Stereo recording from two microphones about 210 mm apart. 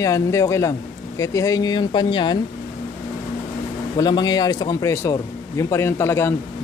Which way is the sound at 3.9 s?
20° left (ahead or behind).